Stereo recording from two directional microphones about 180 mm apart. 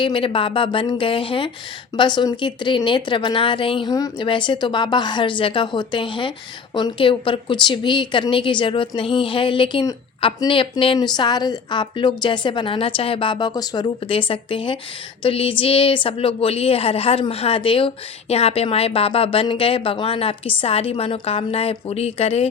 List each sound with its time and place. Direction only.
0.0 s a woman's voice: 30° left (ahead or behind)